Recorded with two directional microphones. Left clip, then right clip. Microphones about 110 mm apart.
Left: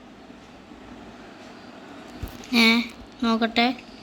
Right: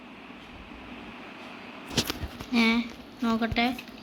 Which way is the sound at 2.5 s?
30° left (ahead or behind).